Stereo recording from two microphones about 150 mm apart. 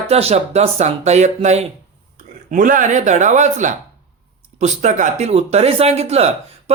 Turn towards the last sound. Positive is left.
turn(degrees=-45)  # may be behind; listen again after turning